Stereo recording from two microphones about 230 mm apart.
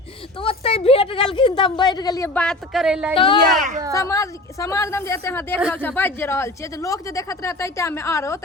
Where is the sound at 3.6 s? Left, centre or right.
Right.